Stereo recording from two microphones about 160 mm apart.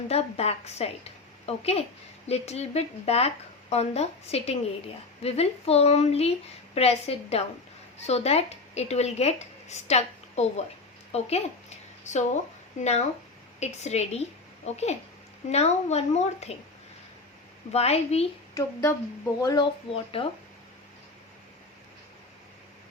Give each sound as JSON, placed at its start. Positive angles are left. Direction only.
{"t": 0.1, "sound": "a woman's voice", "side_deg": 40}
{"t": 17.7, "sound": "speech", "side_deg": 40}
{"t": 18.5, "sound": "speech", "side_deg": 20}